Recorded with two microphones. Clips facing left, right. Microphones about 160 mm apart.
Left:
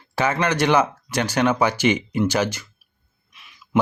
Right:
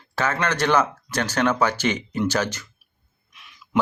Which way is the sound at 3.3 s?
Centre (ahead or behind).